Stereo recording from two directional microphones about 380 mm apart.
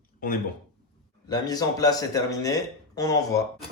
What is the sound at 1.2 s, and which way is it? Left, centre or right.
Speech, centre.